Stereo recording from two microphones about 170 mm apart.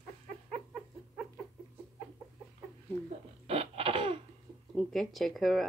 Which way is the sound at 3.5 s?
35° right (ahead or behind).